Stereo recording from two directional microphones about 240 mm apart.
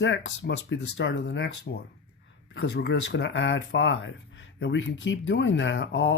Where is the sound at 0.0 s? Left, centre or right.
Left.